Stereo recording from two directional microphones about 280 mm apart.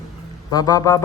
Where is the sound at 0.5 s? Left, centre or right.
Centre.